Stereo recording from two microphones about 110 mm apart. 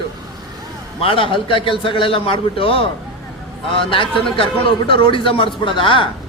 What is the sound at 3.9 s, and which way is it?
A man's voice, 55° left (ahead or behind).